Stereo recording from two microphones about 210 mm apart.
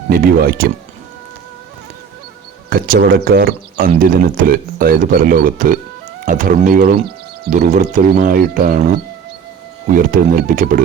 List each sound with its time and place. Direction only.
0.1 s speech: 45° right (ahead or behind)
2.6 s speech: 45° right (ahead or behind)